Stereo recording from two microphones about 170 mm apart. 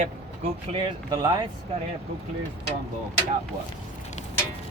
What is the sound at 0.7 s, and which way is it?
Speech, 30° right (ahead or behind).